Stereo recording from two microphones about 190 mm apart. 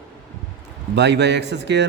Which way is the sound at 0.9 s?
65° right (ahead or behind).